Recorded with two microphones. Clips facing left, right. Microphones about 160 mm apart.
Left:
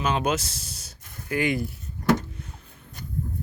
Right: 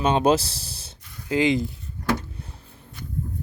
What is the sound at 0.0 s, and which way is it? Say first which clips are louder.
Speech: right 6 dB; 30° right (ahead or behind).